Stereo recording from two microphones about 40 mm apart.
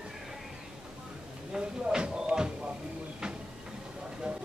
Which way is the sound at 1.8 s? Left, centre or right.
Right.